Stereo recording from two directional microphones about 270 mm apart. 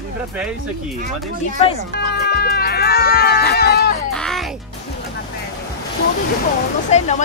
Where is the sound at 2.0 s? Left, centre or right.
Left.